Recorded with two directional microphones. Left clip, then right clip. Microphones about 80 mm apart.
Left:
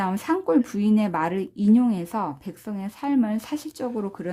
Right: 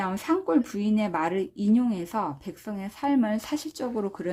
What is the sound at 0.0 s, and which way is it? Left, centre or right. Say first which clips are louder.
Speech: left 2 dB; left.